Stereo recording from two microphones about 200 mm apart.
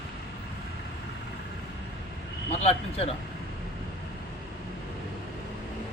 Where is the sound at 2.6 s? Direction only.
30° left (ahead or behind).